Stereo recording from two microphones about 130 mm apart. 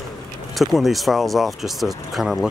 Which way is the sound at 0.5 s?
Centre (ahead or behind).